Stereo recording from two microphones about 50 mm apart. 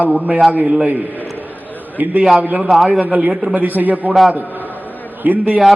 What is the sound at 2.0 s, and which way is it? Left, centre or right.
A man's voice, right.